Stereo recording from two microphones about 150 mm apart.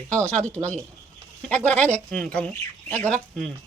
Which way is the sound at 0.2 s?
10° left (ahead or behind).